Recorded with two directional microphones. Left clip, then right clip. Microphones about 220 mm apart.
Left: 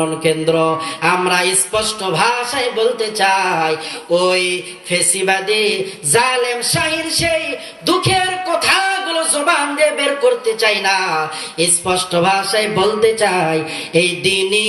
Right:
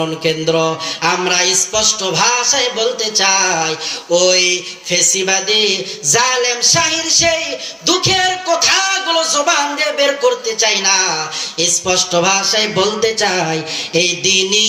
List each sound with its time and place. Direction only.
0.3 s speech: 10° right (ahead or behind)
7.9 s music: 10° right (ahead or behind)
11.6 s speech: 10° right (ahead or behind)